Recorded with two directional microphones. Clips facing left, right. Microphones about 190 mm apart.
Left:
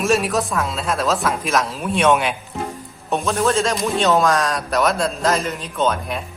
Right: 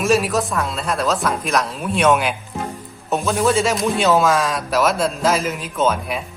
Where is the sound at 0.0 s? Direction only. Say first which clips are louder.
Right 1 dB; centre (ahead or behind).